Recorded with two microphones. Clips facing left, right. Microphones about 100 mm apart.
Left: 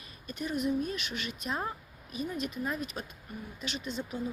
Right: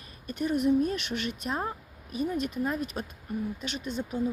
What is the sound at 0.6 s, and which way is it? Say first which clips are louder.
Speech: right 6 dB; 60° right (ahead or behind).